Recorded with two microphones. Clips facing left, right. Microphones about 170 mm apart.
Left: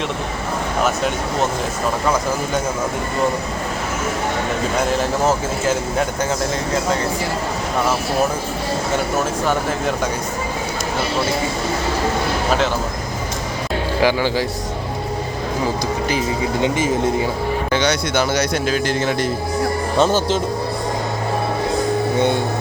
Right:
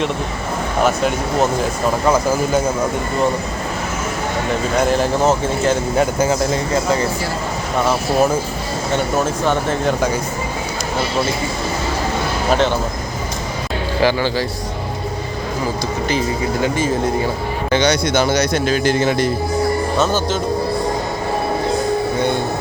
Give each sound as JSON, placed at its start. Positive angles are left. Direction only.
{"t": 2.0, "sound": "a man's voice", "side_deg": -5}
{"t": 5.6, "sound": "a man's voice", "side_deg": 0}
{"t": 9.5, "sound": "a man's voice", "side_deg": 0}
{"t": 14.0, "sound": "speech", "side_deg": 15}
{"t": 16.6, "sound": "speech", "side_deg": 20}
{"t": 17.7, "sound": "a man's voice", "side_deg": 5}
{"t": 20.0, "sound": "speech", "side_deg": 30}